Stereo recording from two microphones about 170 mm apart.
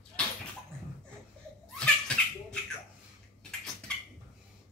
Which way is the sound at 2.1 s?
5° left (ahead or behind).